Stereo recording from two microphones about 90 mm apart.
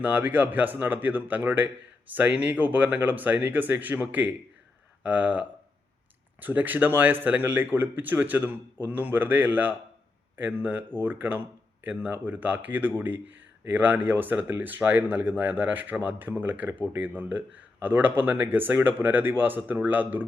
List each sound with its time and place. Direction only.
0.0 s speech: 20° right (ahead or behind)